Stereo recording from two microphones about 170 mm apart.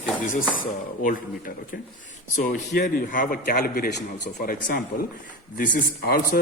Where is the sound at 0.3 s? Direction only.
55° left (ahead or behind).